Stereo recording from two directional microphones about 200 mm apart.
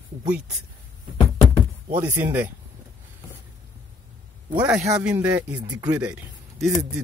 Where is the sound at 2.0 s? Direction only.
10° right (ahead or behind).